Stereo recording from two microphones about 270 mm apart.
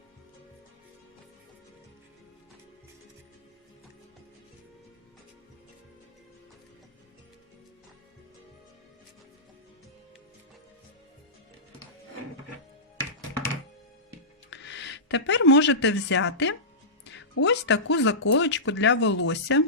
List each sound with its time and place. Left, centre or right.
14.5 s speech: left